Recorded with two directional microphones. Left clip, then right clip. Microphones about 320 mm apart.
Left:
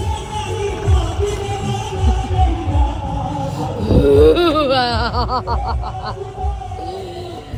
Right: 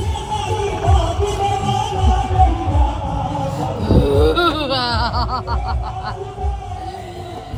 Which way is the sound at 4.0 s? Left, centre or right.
Centre.